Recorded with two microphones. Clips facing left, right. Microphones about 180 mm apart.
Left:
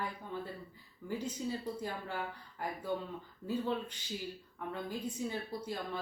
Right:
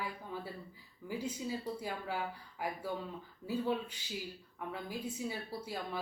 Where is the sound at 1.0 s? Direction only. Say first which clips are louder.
Left 1 dB; 10° right (ahead or behind).